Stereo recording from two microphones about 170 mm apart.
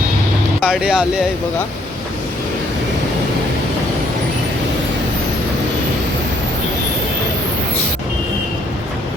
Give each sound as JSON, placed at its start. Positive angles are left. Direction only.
{"t": 0.6, "sound": "speech", "side_deg": -5}